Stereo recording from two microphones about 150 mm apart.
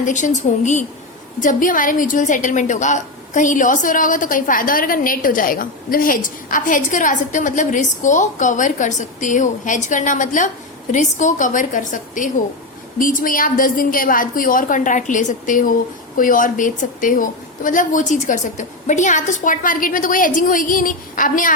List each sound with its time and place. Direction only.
0.0 s a woman's voice: 55° left (ahead or behind)
1.4 s a woman's voice: 65° left (ahead or behind)